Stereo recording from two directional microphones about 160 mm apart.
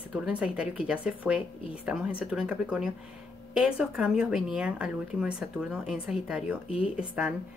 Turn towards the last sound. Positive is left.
turn(degrees=-5)  # may be behind; listen again after turning